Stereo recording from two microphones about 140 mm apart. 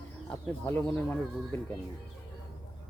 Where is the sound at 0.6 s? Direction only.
15° left (ahead or behind).